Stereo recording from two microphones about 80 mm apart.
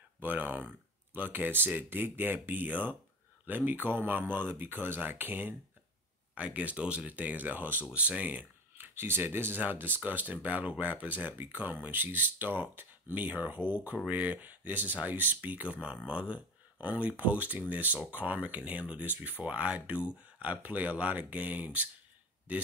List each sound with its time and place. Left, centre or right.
0.2 s speech: right